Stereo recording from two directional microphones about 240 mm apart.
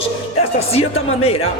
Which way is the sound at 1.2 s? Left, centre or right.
Left.